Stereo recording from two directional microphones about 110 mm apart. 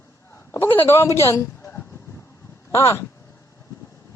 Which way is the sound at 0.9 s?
25° left (ahead or behind).